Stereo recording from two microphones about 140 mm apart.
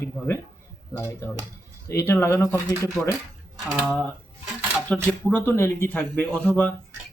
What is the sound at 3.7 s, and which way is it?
Speech, 10° right (ahead or behind).